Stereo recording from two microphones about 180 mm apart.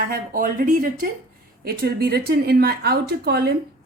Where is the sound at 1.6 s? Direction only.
60° right (ahead or behind).